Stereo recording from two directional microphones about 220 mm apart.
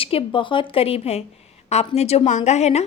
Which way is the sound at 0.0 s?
25° left (ahead or behind).